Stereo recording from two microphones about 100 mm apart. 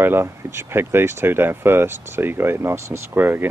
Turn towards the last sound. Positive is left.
turn(degrees=-20)  # may be behind; listen again after turning